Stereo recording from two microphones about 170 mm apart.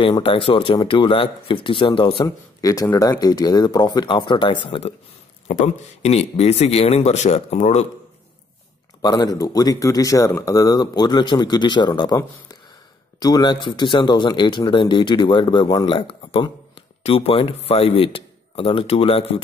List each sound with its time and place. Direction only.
0.0 s a man's voice: 30° left (ahead or behind)
9.0 s speech: 20° left (ahead or behind)
13.2 s speech: 25° left (ahead or behind)